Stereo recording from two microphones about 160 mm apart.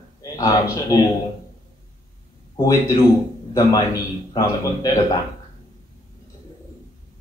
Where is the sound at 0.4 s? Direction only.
20° left (ahead or behind).